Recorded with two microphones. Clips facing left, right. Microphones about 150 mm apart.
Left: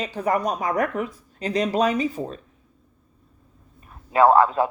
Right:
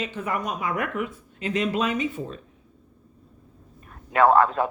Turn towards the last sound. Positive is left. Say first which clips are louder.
# left 2 dB
turn(degrees=5)  # may be behind; listen again after turning